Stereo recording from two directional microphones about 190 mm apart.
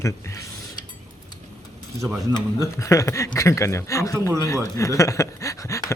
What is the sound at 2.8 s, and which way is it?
Speech, 15° left (ahead or behind).